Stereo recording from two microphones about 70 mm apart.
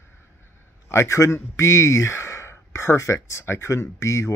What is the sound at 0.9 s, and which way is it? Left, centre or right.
Speech, left.